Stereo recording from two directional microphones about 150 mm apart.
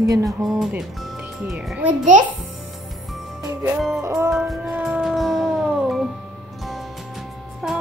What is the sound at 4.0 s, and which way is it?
Music, 20° right (ahead or behind).